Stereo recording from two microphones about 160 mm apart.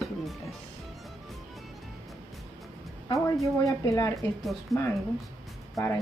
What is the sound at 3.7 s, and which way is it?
Speech, 20° left (ahead or behind).